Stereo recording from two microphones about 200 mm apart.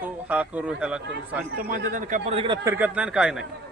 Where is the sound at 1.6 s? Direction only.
45° right (ahead or behind); by 2.6 s 25° right (ahead or behind).